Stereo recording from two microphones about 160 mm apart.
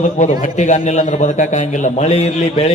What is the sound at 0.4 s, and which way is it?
A man's voice, 50° left (ahead or behind).